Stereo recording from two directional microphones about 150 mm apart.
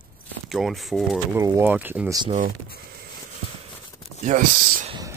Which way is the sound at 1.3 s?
20° right (ahead or behind).